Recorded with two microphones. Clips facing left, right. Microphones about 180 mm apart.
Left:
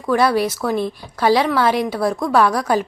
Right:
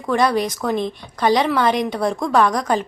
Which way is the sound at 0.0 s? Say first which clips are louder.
Left 2 dB; 5° left (ahead or behind).